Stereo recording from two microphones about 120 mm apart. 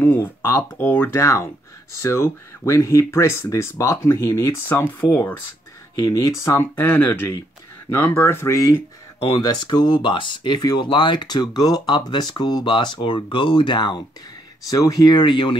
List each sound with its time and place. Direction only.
0.0 s speech: 15° left (ahead or behind)
4.6 s speech: 15° left (ahead or behind)
5.9 s speech: 30° left (ahead or behind)
9.5 s speech: 35° left (ahead or behind)